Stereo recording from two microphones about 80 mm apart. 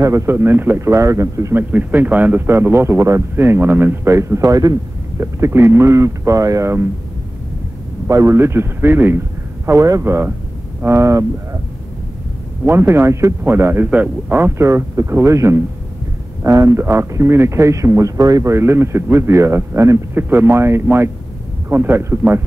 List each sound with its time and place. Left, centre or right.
0.0 s speech: right
1.5 s a man's voice: right
5.2 s speech: right
8.1 s speech: right
9.7 s speech: right
12.6 s speech: right
13.8 s a man's voice: centre